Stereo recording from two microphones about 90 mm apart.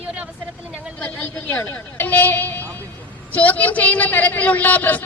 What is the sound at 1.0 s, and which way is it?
A man's voice, 15° left (ahead or behind).